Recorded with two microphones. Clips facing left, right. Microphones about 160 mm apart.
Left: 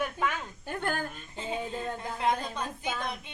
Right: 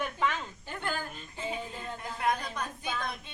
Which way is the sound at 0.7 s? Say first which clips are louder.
Left 4 dB; 50° left (ahead or behind).